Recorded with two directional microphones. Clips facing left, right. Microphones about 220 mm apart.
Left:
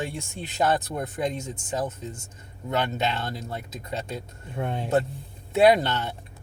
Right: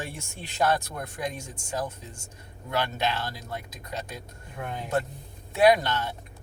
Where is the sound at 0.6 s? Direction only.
25° left (ahead or behind).